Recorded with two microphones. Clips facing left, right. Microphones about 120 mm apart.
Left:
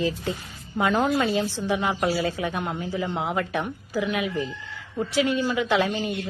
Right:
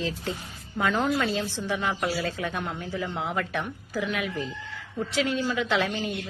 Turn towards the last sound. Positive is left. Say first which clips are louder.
# left 3 dB
turn(degrees=5)  # may be behind; listen again after turning